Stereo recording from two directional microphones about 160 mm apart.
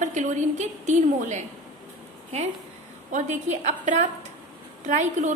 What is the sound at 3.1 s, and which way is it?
A woman's voice, 45° right (ahead or behind).